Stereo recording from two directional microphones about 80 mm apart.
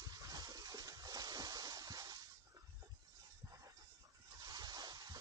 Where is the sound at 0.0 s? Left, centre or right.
Right.